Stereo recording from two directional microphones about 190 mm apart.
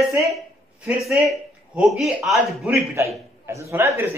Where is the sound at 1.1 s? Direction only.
Centre (ahead or behind).